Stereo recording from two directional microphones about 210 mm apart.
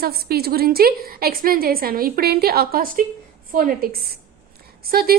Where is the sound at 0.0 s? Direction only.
45° right (ahead or behind).